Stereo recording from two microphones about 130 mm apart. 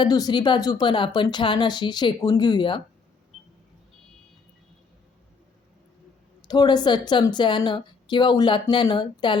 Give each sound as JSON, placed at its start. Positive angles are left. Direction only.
{"t": 0.0, "sound": "a woman's voice", "side_deg": 30}
{"t": 6.5, "sound": "a woman's voice", "side_deg": 35}